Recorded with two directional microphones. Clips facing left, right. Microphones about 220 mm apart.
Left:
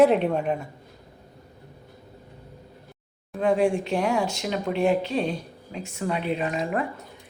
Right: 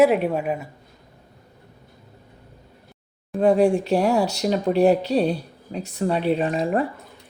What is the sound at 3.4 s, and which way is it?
Speech, 35° right (ahead or behind).